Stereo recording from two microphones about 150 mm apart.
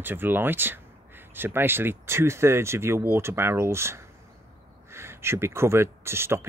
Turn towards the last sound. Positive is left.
turn(degrees=-15)  # may be behind; listen again after turning